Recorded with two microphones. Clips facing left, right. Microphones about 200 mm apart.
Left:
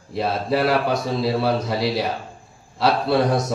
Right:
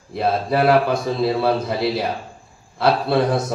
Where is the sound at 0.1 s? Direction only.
55° right (ahead or behind).